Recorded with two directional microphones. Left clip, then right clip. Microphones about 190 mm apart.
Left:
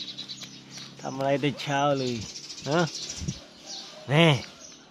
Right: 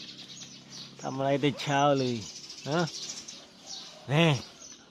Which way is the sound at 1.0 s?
10° right (ahead or behind).